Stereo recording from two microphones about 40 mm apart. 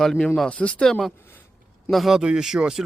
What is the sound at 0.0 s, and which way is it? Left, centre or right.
Speech, centre.